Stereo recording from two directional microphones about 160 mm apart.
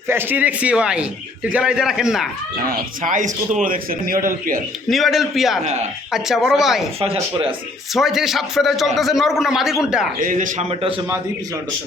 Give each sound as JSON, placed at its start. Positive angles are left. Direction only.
{"t": 0.1, "sound": "a man's voice", "side_deg": -10}
{"t": 2.6, "sound": "speech", "side_deg": -60}
{"t": 4.9, "sound": "a man's voice", "side_deg": 0}
{"t": 7.0, "sound": "speech", "side_deg": -35}
{"t": 7.9, "sound": "a man's voice", "side_deg": 0}
{"t": 10.2, "sound": "a man's voice", "side_deg": -55}